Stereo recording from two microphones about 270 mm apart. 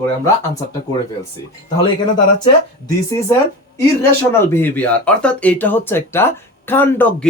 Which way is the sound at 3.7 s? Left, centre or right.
Centre.